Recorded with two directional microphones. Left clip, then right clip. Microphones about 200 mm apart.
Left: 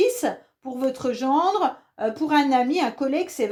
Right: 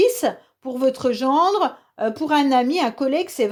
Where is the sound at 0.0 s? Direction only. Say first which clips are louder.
Right 4 dB; 45° right (ahead or behind).